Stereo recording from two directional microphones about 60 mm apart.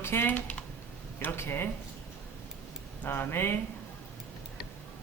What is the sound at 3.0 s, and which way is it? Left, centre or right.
Speech, left.